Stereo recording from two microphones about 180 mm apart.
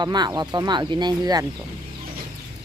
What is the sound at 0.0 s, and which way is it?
Speech, 25° right (ahead or behind).